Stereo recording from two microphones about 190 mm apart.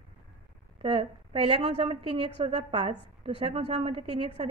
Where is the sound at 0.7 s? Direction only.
25° right (ahead or behind).